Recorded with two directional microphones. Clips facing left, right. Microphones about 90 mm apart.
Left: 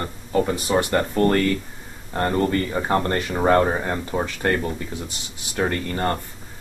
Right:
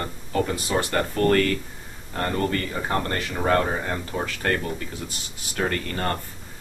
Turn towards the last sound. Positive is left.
turn(degrees=25)  # may be behind; listen again after turning